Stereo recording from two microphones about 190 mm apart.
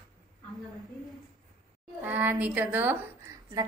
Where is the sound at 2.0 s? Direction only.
10° right (ahead or behind).